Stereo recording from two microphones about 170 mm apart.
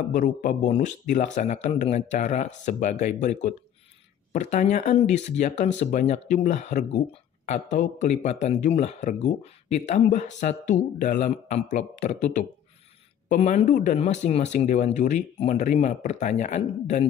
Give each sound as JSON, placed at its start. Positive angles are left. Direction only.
{"t": 0.1, "sound": "speech", "side_deg": 50}